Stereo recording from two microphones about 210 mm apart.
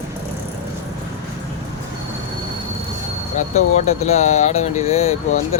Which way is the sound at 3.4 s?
35° left (ahead or behind).